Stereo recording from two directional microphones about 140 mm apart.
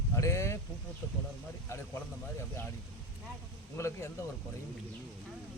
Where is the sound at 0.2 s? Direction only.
20° left (ahead or behind).